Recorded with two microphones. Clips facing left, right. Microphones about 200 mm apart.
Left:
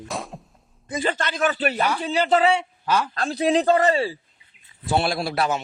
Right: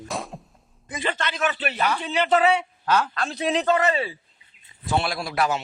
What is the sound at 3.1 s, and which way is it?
A man's voice, 35° left (ahead or behind).